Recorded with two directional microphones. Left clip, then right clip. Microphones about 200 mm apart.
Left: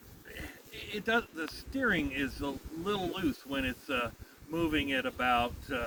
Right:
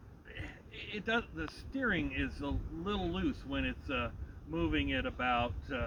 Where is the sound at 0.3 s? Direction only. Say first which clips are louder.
Left 3 dB; 10° left (ahead or behind).